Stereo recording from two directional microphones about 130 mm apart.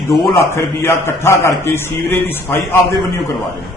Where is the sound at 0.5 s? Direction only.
20° left (ahead or behind).